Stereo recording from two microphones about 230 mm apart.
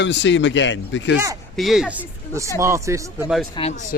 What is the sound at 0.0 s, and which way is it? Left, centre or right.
Speech, left.